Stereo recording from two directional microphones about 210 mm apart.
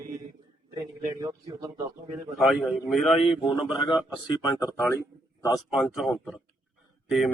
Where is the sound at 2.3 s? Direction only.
Centre (ahead or behind).